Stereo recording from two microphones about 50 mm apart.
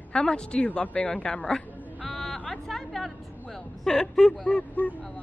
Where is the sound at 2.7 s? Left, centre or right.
Centre.